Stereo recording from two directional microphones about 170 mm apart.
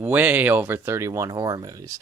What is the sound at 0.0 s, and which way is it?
Speech, 10° right (ahead or behind).